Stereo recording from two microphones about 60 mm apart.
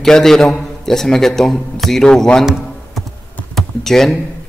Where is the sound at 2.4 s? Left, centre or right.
Centre.